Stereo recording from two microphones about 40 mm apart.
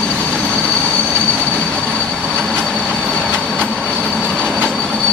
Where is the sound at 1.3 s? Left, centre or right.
Left.